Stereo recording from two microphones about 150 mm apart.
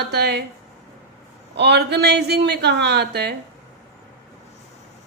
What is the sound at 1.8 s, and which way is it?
A woman's voice, 90° right.